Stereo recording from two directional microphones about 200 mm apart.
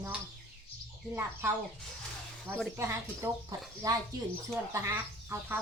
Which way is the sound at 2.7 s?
15° right (ahead or behind).